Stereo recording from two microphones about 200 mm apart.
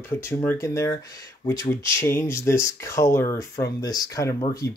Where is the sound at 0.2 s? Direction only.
15° left (ahead or behind).